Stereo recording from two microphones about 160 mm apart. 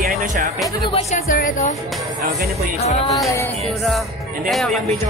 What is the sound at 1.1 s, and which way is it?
Speech, 55° left (ahead or behind).